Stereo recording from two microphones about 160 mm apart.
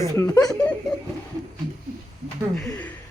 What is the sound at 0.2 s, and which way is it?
Laughter, 10° left (ahead or behind).